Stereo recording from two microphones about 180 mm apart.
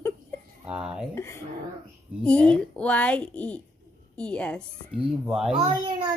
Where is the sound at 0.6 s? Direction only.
5° right (ahead or behind).